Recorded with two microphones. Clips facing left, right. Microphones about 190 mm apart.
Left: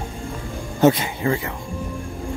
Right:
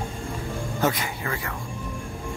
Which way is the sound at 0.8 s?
25° left (ahead or behind).